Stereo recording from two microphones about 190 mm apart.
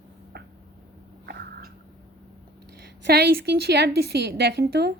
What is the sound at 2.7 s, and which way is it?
A woman's voice, 60° right (ahead or behind).